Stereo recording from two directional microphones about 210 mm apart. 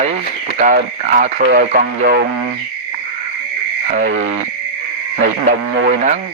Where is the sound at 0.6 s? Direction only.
40° right (ahead or behind).